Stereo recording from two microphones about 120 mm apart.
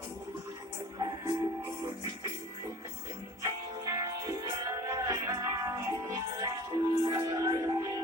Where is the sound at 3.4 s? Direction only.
30° right (ahead or behind).